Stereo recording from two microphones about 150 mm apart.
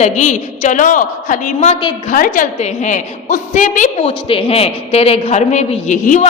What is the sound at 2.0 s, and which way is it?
A man's voice, 65° left (ahead or behind).